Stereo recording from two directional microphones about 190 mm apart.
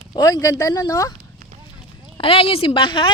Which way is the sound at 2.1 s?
30° left (ahead or behind).